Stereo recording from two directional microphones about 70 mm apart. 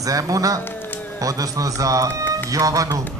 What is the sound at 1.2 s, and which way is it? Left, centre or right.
A man's voice, right.